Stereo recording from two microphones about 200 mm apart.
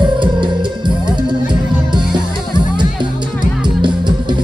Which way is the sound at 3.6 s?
25° right (ahead or behind).